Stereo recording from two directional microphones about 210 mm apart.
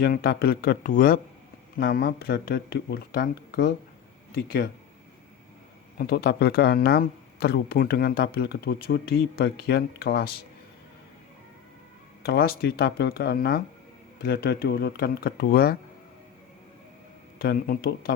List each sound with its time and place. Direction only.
0.0 s speech: 45° left (ahead or behind)
6.0 s speech: 45° left (ahead or behind)
12.2 s speech: 45° left (ahead or behind)
17.3 s speech: 45° left (ahead or behind)